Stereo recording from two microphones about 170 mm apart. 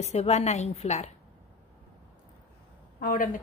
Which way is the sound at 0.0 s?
40° left (ahead or behind).